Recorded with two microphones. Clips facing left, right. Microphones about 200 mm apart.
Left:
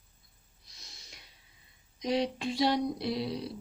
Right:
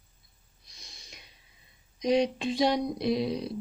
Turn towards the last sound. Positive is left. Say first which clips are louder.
# right 5 dB
turn(degrees=-20)  # may be behind; listen again after turning